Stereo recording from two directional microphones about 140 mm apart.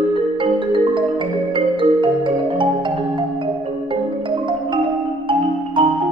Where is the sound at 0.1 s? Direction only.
40° right (ahead or behind).